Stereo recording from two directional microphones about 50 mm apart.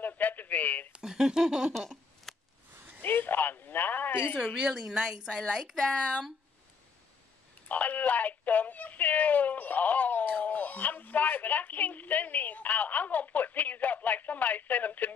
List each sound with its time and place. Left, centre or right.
0.0 s radio: left
1.0 s speech: centre
1.7 s a sound: centre
3.0 s a sound: left
4.6 s a woman's voice: centre
7.6 s speech: left